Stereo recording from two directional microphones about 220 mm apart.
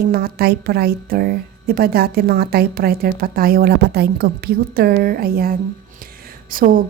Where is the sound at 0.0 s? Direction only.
45° right (ahead or behind).